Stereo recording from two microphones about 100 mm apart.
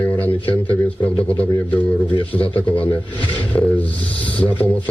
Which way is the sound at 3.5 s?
20° left (ahead or behind).